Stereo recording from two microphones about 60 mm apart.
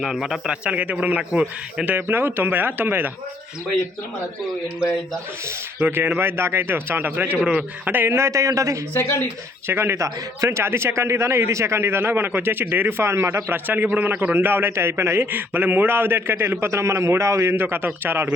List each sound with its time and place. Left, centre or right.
0.0 s a man's voice: centre
0.4 s speech: centre
5.8 s a man's voice: right
7.3 s speech: centre
7.9 s a man's voice: right
8.1 s a man's voice: right
9.6 s a man's voice: right
13.5 s a man's voice: right
15.3 s a man's voice: right
17.5 s a man's voice: right